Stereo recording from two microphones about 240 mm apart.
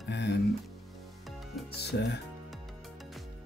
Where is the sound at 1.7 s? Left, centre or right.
Left.